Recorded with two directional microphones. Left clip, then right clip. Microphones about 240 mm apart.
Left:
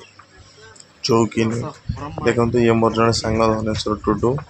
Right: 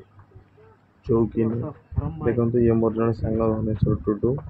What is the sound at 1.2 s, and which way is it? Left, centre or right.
Speech, centre.